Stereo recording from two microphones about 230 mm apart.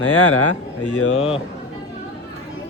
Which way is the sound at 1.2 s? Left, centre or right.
Left.